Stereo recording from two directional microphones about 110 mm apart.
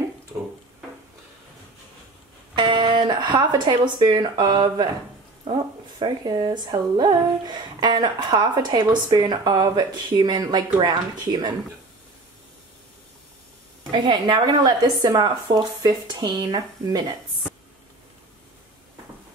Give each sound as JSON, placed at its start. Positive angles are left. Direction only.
{"t": 2.5, "sound": "speech", "side_deg": -45}
{"t": 13.9, "sound": "speech", "side_deg": -45}